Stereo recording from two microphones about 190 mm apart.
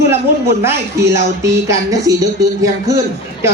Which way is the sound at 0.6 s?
15° right (ahead or behind).